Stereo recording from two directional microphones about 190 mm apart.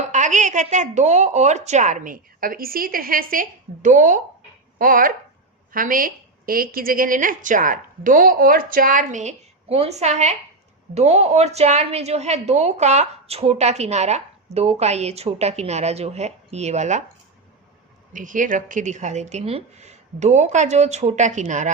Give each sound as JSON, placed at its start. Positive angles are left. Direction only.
{"t": 0.1, "sound": "a woman's voice", "side_deg": -40}
{"t": 18.1, "sound": "a woman's voice", "side_deg": -45}